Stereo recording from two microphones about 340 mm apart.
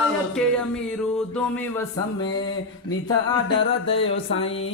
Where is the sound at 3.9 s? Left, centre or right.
Centre.